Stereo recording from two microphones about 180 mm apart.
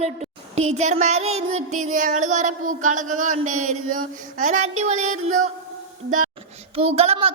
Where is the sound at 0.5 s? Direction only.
35° right (ahead or behind).